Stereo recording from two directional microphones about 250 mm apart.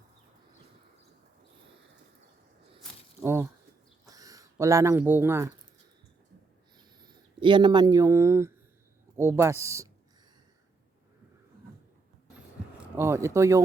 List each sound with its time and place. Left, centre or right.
3.2 s speech: centre
7.0 s speech: centre
13.0 s speech: centre